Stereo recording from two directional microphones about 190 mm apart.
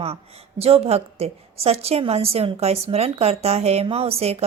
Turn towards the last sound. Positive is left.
turn(degrees=-30)  # may be behind; listen again after turning